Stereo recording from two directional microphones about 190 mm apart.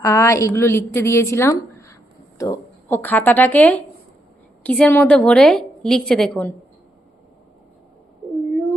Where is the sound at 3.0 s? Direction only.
10° left (ahead or behind).